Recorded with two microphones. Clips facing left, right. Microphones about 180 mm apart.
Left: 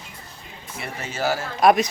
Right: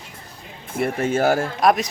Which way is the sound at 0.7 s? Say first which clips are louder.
Right 13 dB; 50° right (ahead or behind).